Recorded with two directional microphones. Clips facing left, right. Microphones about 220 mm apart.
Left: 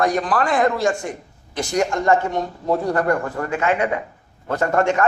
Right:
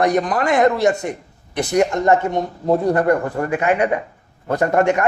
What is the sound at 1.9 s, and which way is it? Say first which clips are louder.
A man's voice: right 2 dB; 20° right (ahead or behind).